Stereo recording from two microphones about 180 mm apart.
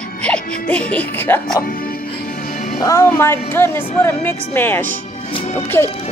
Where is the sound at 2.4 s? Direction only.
45° left (ahead or behind).